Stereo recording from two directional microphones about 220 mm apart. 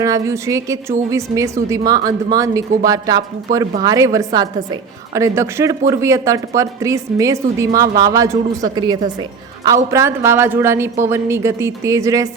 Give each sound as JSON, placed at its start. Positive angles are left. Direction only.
{"t": 0.0, "sound": "a woman's voice", "side_deg": -15}